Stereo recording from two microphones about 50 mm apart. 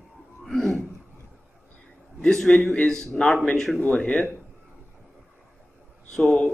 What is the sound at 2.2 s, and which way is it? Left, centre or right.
A man's voice, centre.